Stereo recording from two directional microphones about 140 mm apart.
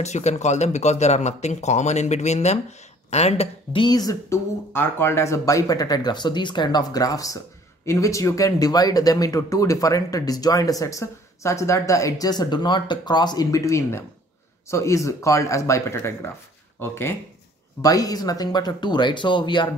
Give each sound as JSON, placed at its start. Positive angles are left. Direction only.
{"t": 0.0, "sound": "speech", "side_deg": 55}
{"t": 3.8, "sound": "speech", "side_deg": 25}